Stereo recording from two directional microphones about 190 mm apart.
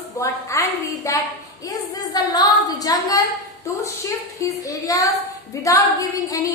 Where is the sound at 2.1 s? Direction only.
20° left (ahead or behind).